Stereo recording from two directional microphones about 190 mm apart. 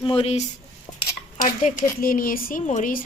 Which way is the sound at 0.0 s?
30° left (ahead or behind).